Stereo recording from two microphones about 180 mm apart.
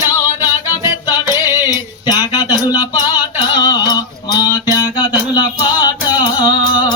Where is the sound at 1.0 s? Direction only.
20° left (ahead or behind).